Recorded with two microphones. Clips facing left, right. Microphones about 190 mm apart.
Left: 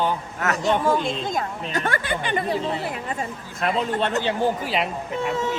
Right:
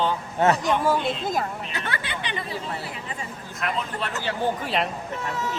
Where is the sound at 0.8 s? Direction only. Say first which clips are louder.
Left 1 dB; 5° right (ahead or behind).